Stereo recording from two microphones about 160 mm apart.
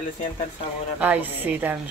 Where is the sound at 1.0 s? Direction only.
10° right (ahead or behind).